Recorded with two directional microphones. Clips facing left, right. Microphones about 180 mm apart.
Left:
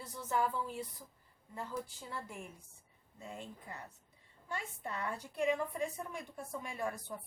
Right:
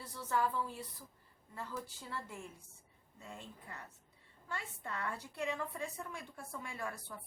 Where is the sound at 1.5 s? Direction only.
15° left (ahead or behind).